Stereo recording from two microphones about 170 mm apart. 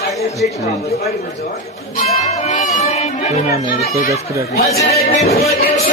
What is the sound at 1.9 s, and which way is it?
Music, 45° left (ahead or behind).